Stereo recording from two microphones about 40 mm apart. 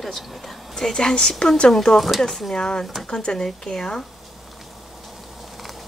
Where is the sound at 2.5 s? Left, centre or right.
Left.